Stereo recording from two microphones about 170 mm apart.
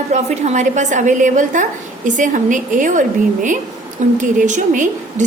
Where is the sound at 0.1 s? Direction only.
40° right (ahead or behind).